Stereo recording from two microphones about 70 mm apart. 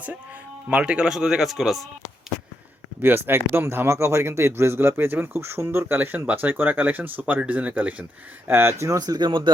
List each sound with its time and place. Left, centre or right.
0.7 s speech: centre
3.0 s speech: right
8.4 s speech: right
8.8 s speech: right